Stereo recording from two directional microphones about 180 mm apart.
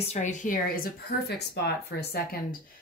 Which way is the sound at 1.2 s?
65° left (ahead or behind).